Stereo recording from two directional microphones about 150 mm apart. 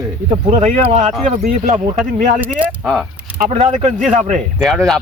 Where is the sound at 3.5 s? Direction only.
45° right (ahead or behind).